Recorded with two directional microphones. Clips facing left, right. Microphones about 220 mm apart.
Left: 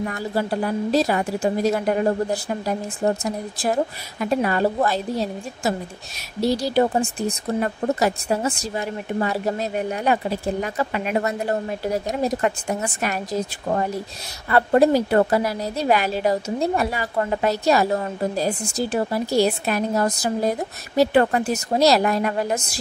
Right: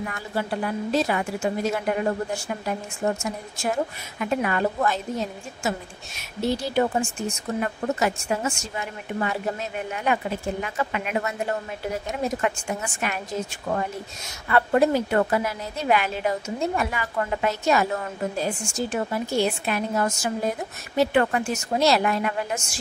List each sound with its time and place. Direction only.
0.0 s a woman's voice: 35° left (ahead or behind)